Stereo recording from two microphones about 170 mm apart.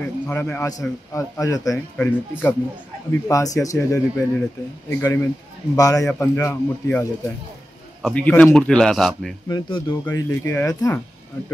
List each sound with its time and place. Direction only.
0.0 s a man's voice: 10° left (ahead or behind)
2.0 s a man's voice: 10° left (ahead or behind)
9.5 s speech: 30° left (ahead or behind)
10.0 s a man's voice: 15° left (ahead or behind)